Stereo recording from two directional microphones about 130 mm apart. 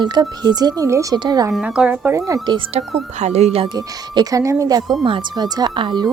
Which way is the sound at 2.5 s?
35° right (ahead or behind).